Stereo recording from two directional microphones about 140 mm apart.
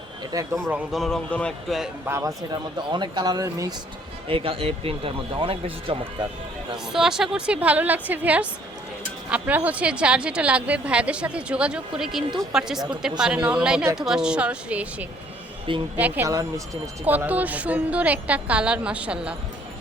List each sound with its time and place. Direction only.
0.2 s a man's voice: 25° right (ahead or behind)
0.7 s a woman's voice: centre (ahead or behind)
2.0 s speech: 20° right (ahead or behind)
2.5 s speech: 30° right (ahead or behind)
4.3 s speech: 40° right (ahead or behind)
6.8 s a woman's voice: 5° right (ahead or behind)
16.2 s speech: 25° right (ahead or behind)
17.1 s speech: 10° right (ahead or behind)